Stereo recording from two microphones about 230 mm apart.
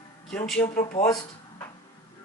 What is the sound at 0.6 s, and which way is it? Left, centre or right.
Speech, left.